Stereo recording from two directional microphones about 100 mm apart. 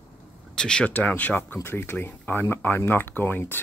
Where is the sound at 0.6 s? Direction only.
10° left (ahead or behind).